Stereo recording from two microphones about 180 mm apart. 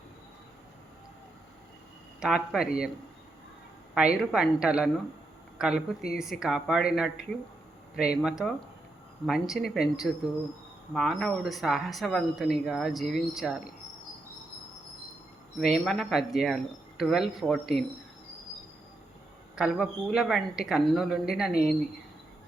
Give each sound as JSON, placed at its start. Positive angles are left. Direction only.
{"t": 2.2, "sound": "speech", "side_deg": -5}
{"t": 3.9, "sound": "a woman's voice", "side_deg": -5}
{"t": 15.6, "sound": "speech", "side_deg": 0}
{"t": 19.5, "sound": "speech", "side_deg": -5}